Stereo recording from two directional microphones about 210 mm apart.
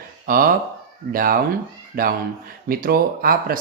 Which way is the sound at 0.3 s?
45° right (ahead or behind).